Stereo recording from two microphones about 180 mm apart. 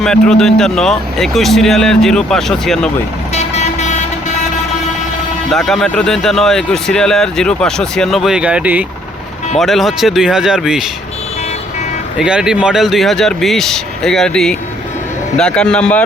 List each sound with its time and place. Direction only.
0.0 s speech: 5° left (ahead or behind)
3.3 s vehicle: 40° left (ahead or behind)
5.5 s speech: centre (ahead or behind)
12.2 s speech: 5° right (ahead or behind)